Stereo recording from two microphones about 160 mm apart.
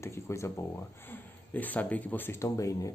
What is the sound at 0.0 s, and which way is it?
Speech, 15° left (ahead or behind).